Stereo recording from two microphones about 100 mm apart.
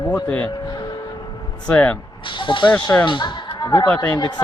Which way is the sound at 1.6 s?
15° left (ahead or behind).